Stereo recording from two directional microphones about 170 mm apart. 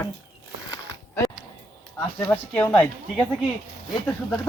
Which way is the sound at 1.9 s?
10° left (ahead or behind).